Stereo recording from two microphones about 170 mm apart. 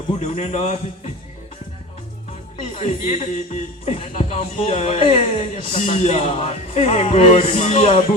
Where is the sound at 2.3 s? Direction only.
40° left (ahead or behind).